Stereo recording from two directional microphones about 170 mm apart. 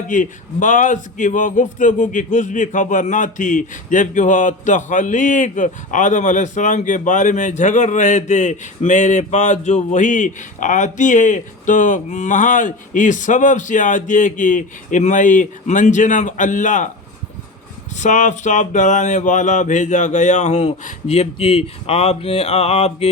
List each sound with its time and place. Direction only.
0.1 s a man's voice: 50° left (ahead or behind)
18.0 s a man's voice: 45° left (ahead or behind)